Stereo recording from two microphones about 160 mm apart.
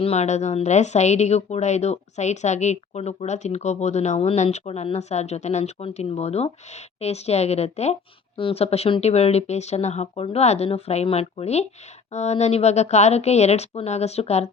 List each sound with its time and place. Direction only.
0.0 s a woman's voice: 40° left (ahead or behind)